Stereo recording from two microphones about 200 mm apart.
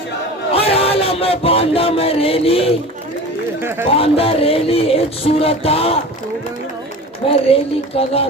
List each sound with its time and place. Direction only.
0.5 s a sound: 30° left (ahead or behind)
3.6 s speech: 10° right (ahead or behind)
3.9 s music: 30° left (ahead or behind)
7.5 s music: 30° left (ahead or behind)